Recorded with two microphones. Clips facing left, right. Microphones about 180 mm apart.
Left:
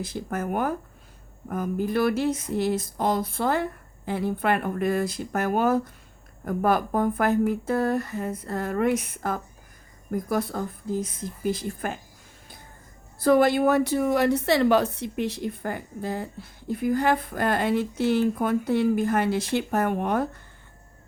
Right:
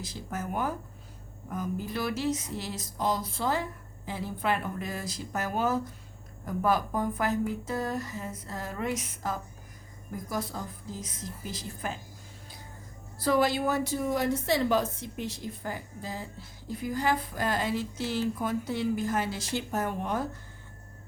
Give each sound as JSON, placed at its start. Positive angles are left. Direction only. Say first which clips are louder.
{"t": 0.0, "sound": "a woman's voice", "louder": "left 7 dB", "side_deg": 55}
{"t": 13.1, "sound": "a woman's voice", "louder": "left 7 dB", "side_deg": 50}